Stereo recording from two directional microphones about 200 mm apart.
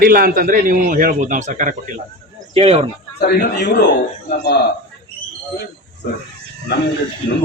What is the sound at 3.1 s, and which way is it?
Speech, 55° left (ahead or behind).